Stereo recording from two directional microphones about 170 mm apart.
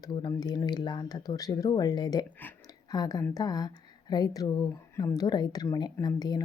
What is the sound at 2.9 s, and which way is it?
A woman's voice, 25° left (ahead or behind).